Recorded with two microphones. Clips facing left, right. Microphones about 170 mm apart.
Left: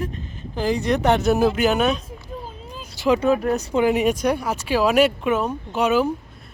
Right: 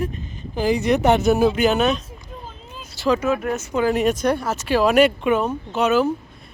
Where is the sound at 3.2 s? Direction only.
35° left (ahead or behind).